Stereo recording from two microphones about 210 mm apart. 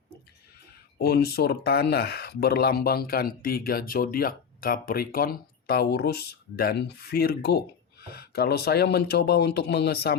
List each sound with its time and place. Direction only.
0.9 s speech: 50° left (ahead or behind)